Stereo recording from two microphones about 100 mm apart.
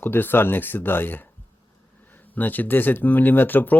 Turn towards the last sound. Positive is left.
turn(degrees=20)  # may be behind; listen again after turning